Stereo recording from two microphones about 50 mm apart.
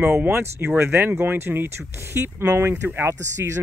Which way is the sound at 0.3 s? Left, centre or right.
Right.